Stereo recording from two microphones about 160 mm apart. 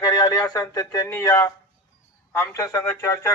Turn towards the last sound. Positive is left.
turn(degrees=20)  # may be behind; listen again after turning